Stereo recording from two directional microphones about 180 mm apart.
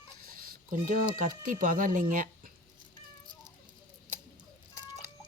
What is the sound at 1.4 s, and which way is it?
Speech, 50° right (ahead or behind).